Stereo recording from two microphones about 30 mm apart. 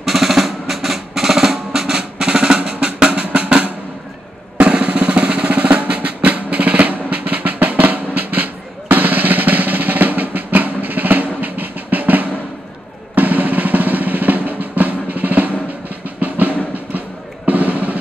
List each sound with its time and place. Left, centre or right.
0.0 s percussion: centre
1.1 s drum roll: centre; by 3.5 s right
4.6 s drum: right
5.5 s percussion: right
13.1 s drum roll: right
16.2 s drum: right
17.5 s drum: right